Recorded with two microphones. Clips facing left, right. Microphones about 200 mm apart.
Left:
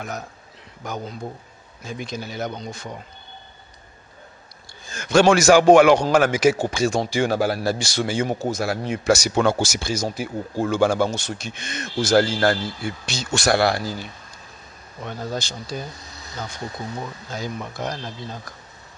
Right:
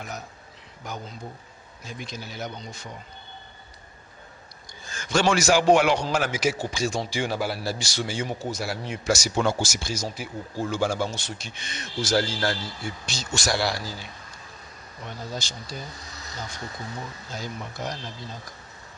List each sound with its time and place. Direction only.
0.8 s a man's voice: 55° left (ahead or behind)
4.9 s a man's voice: 60° left (ahead or behind)
10.6 s speech: 60° left (ahead or behind)
15.0 s speech: 55° left (ahead or behind)